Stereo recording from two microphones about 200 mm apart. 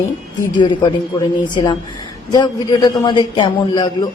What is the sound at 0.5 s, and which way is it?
Speech, 20° left (ahead or behind).